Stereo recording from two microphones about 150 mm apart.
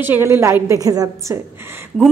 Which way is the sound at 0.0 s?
15° right (ahead or behind).